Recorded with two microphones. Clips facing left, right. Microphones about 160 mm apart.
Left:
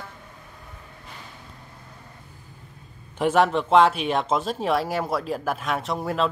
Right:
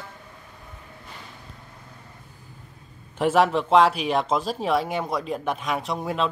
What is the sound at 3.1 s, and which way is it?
Speech, centre (ahead or behind).